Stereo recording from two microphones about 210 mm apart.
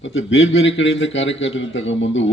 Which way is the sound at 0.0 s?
65° left (ahead or behind).